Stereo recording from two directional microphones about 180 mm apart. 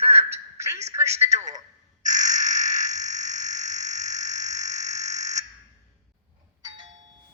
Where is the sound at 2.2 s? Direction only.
20° right (ahead or behind).